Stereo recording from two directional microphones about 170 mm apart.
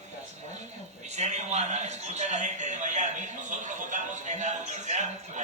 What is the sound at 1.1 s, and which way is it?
Music, 40° right (ahead or behind).